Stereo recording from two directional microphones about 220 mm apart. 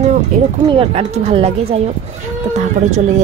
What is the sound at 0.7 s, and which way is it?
Speech, 25° right (ahead or behind).